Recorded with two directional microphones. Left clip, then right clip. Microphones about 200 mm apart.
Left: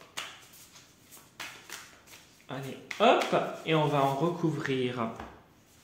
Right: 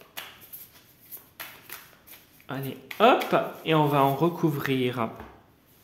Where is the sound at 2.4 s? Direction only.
55° right (ahead or behind).